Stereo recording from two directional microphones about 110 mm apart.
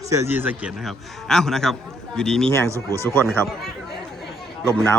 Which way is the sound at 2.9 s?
25° left (ahead or behind).